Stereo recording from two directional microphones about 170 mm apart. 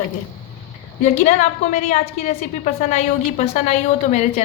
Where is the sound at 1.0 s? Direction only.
45° left (ahead or behind).